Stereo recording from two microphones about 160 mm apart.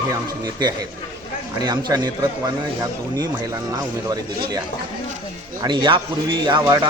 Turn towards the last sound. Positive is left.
turn(degrees=-25)  # may be behind; listen again after turning